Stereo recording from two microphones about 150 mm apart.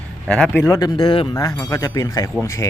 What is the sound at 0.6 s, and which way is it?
Speech, 25° left (ahead or behind).